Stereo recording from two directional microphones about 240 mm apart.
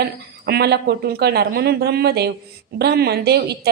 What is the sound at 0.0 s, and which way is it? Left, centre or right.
A woman's voice, right.